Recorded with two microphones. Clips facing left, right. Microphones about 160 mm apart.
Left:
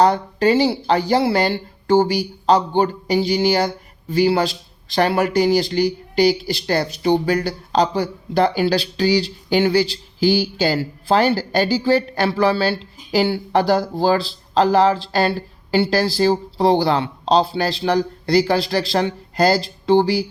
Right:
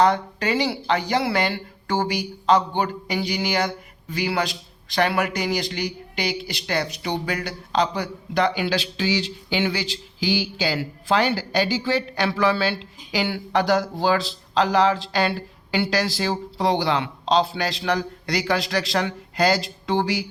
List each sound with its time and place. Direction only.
0.0 s speech: 35° left (ahead or behind)